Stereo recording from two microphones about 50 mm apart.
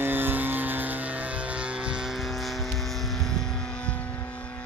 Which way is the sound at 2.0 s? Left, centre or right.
Centre.